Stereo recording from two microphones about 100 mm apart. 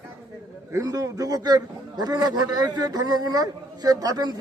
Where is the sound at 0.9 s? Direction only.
35° right (ahead or behind).